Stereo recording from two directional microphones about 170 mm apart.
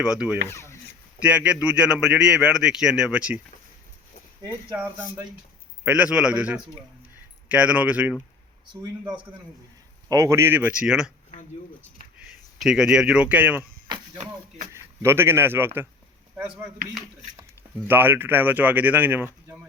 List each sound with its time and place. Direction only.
0.0 s a man's voice: 5° right (ahead or behind)
0.4 s speech: 15° left (ahead or behind)
1.7 s a man's voice: 5° right (ahead or behind)
4.7 s speech: 10° right (ahead or behind)
10.1 s speech: 20° right (ahead or behind)
12.5 s a man's voice: 5° right (ahead or behind)
14.7 s speech: 15° right (ahead or behind)
17.8 s speech: 10° right (ahead or behind)